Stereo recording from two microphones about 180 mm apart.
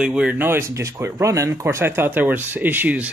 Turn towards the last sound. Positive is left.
turn(degrees=-10)  # may be behind; listen again after turning